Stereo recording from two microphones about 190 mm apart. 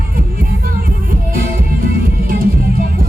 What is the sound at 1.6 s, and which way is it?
Music, 50° right (ahead or behind).